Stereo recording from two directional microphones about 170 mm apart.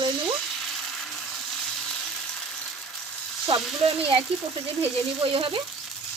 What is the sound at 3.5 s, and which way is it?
Speech, 30° right (ahead or behind).